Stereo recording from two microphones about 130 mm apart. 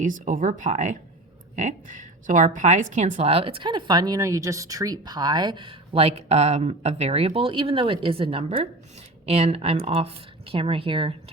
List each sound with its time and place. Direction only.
0.0 s a woman's voice: 90° right; by 11.1 s 40° right (ahead or behind)